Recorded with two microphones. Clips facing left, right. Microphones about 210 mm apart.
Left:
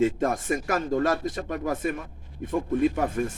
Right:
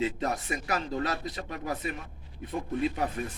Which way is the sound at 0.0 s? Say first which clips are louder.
Left 7 dB; 50° left (ahead or behind).